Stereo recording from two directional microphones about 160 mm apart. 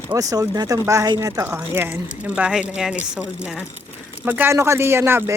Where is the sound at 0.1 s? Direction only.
20° right (ahead or behind).